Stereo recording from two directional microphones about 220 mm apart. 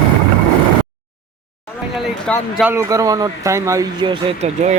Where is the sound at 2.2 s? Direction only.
5° left (ahead or behind).